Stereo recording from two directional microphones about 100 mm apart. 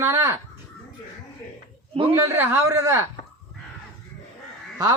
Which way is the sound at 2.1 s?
25° right (ahead or behind).